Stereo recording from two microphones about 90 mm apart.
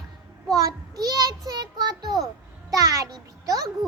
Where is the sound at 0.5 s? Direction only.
45° right (ahead or behind).